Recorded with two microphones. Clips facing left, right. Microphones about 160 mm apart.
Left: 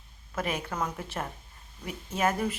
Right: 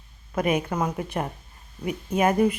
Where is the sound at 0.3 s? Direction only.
15° right (ahead or behind).